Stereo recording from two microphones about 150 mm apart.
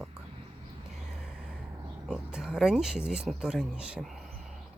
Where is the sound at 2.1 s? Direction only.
5° right (ahead or behind).